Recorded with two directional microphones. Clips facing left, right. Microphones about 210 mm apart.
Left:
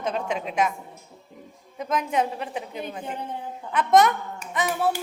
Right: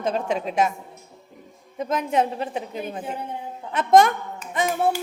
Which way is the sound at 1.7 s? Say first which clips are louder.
Right 2 dB; 30° right (ahead or behind).